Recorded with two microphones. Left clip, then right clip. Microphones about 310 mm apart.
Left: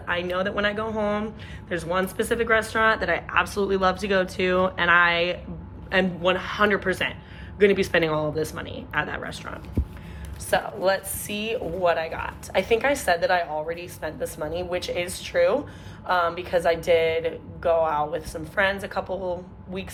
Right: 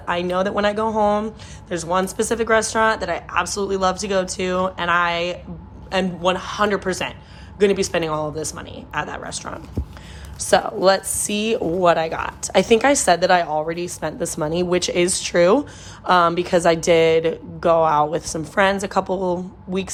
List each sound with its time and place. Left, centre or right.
0.0 s a woman's voice: centre